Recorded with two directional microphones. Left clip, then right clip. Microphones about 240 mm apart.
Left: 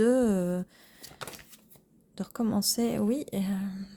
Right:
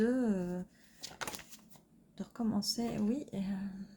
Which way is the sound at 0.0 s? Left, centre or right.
Left.